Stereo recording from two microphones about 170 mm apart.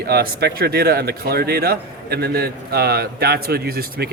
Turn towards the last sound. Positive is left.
turn(degrees=-65)  # may be behind; listen again after turning